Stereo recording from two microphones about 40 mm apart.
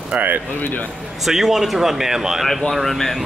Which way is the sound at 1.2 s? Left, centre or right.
Centre.